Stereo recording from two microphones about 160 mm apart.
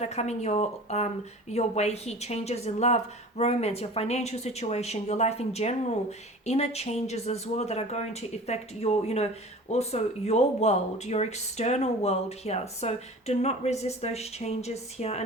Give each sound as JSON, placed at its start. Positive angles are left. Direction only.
{"t": 0.0, "sound": "speech", "side_deg": 45}